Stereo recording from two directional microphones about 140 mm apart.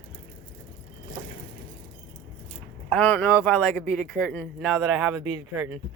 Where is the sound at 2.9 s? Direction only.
10° left (ahead or behind).